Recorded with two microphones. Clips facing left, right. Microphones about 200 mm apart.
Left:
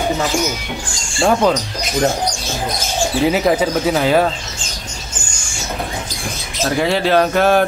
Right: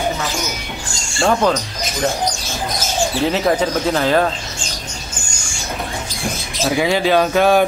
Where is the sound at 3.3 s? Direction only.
10° left (ahead or behind).